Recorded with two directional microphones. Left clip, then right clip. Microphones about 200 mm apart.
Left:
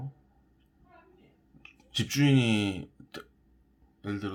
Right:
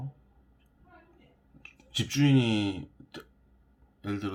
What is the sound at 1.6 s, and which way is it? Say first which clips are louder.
Speech: even; centre (ahead or behind).